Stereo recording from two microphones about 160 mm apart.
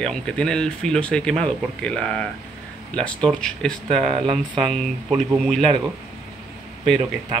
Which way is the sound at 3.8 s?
35° right (ahead or behind).